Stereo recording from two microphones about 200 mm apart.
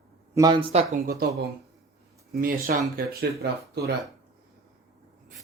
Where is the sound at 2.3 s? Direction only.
45° right (ahead or behind).